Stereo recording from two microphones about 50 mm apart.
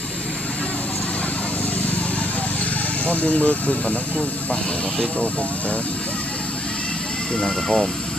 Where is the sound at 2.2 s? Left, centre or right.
Left.